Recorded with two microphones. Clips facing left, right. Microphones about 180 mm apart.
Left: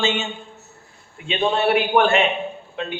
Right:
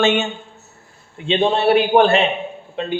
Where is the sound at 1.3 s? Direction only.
30° right (ahead or behind).